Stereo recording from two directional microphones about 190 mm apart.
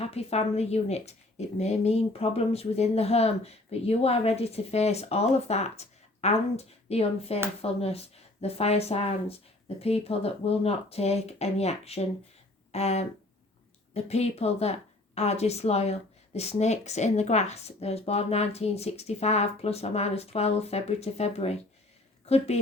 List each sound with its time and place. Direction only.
0.0 s a woman's voice: 35° left (ahead or behind)